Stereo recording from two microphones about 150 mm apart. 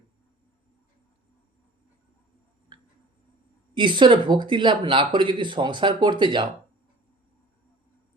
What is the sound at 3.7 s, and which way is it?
Speech, 30° right (ahead or behind).